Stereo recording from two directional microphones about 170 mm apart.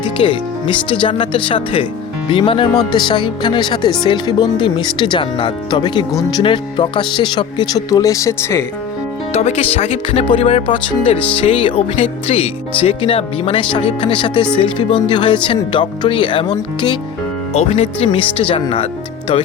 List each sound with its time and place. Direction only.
0.0 s speech: 30° left (ahead or behind)
9.3 s speech: 35° left (ahead or behind)
17.5 s speech: 40° left (ahead or behind)